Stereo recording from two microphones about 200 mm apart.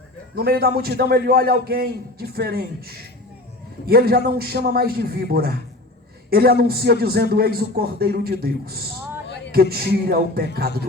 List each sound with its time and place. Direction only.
0.3 s a man's voice: 50° right (ahead or behind)